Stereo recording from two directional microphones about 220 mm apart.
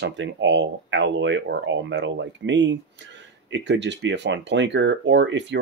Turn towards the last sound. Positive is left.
turn(degrees=-55)  # may be behind; listen again after turning